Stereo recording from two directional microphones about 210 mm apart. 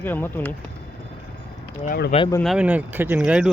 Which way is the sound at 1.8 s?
40° left (ahead or behind).